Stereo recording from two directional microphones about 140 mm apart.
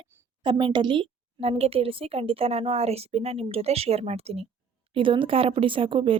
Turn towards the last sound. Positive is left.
turn(degrees=-40)  # may be behind; listen again after turning